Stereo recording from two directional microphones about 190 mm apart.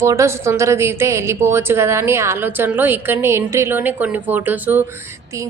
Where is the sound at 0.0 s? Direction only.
15° right (ahead or behind).